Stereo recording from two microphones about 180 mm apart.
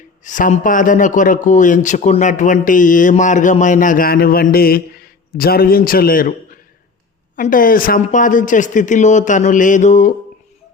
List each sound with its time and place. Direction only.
0.3 s speech: 45° left (ahead or behind)